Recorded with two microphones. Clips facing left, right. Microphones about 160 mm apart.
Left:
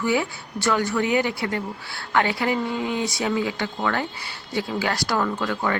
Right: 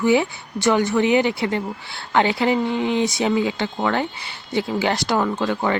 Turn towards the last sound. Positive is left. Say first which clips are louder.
# right 3 dB
turn(degrees=-25)  # may be behind; listen again after turning